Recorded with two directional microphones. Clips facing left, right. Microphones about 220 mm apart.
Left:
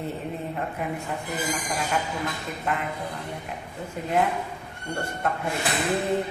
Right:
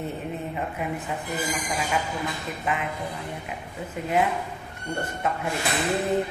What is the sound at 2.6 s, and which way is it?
Speech, 5° right (ahead or behind).